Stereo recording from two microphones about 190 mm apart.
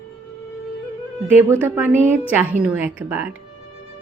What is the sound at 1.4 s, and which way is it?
Speech, 10° right (ahead or behind).